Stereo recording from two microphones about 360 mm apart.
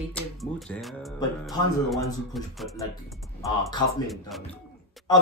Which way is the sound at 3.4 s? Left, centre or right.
Centre.